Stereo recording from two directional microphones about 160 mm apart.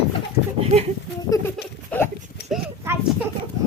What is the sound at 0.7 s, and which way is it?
Speech, 45° right (ahead or behind).